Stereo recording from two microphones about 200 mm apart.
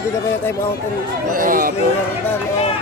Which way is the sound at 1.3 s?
45° right (ahead or behind).